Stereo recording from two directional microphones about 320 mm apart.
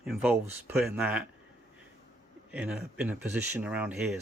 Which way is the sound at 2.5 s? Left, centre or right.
Centre.